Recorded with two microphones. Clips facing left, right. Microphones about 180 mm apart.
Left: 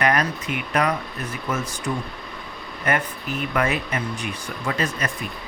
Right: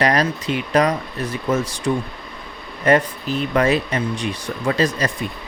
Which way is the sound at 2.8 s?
30° right (ahead or behind).